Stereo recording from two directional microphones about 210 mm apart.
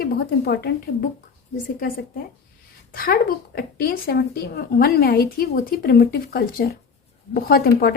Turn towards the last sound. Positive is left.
turn(degrees=45)  # may be behind; listen again after turning